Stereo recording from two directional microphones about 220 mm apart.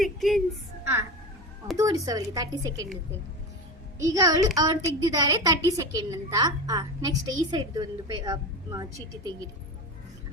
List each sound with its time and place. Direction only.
0.0 s a woman's voice: centre (ahead or behind)
1.7 s a woman's voice: 15° right (ahead or behind)
4.0 s a woman's voice: 15° right (ahead or behind)